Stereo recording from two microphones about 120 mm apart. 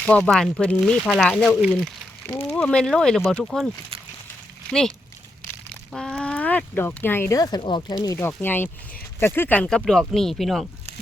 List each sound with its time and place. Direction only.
0.0 s speech: 10° left (ahead or behind)
4.7 s speech: 5° left (ahead or behind)
5.6 s a sound: 5° left (ahead or behind)
7.3 s speech: 30° left (ahead or behind)
8.0 s speech: 25° left (ahead or behind)
9.6 s speech: 5° left (ahead or behind)